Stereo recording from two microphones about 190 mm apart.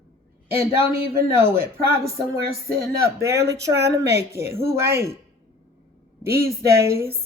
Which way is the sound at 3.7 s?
60° right (ahead or behind).